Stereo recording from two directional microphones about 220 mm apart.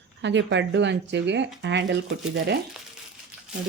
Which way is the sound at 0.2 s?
55° right (ahead or behind).